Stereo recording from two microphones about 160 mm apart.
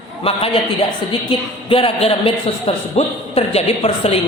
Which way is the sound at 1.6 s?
35° left (ahead or behind).